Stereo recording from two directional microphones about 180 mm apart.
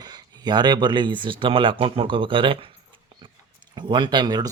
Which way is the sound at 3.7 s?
25° right (ahead or behind).